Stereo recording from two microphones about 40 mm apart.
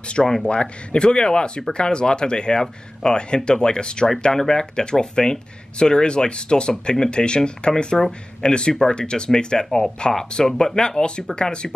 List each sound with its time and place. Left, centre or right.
0.1 s speech: centre